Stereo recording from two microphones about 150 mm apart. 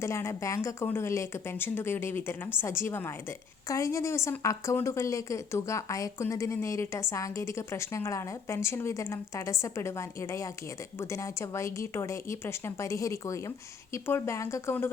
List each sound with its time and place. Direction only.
0.0 s a woman's voice: 20° left (ahead or behind)